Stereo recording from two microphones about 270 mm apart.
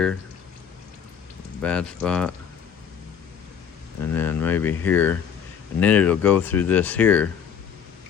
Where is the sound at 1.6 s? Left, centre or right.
Centre.